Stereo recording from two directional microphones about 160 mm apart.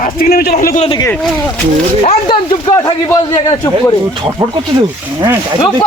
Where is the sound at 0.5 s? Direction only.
55° left (ahead or behind).